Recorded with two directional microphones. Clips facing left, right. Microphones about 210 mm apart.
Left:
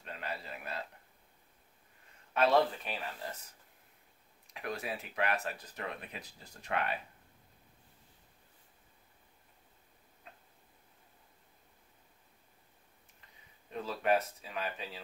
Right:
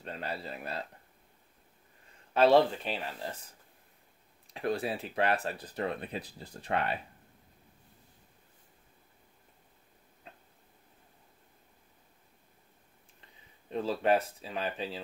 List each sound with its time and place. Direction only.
0.0 s speech: 35° right (ahead or behind)
2.3 s speech: 30° right (ahead or behind)
4.6 s speech: 30° right (ahead or behind)
13.7 s speech: 30° right (ahead or behind)